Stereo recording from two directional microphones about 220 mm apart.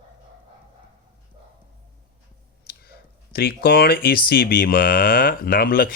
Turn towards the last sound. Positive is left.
turn(degrees=40)  # may be behind; listen again after turning